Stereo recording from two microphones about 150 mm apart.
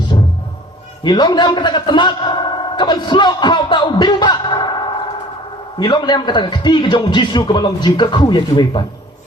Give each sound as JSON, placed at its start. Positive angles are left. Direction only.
{"t": 1.0, "sound": "a man's voice", "side_deg": 30}
{"t": 5.8, "sound": "a man's voice", "side_deg": 30}